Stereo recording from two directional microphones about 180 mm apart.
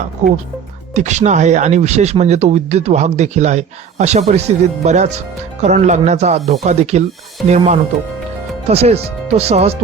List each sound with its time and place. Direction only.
0.2 s speech: 40° right (ahead or behind)